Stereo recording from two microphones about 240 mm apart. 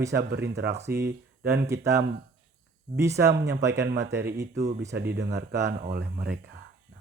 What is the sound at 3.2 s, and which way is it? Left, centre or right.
Speech, right.